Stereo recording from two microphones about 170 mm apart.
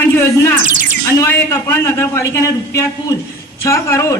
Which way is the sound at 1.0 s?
15° left (ahead or behind).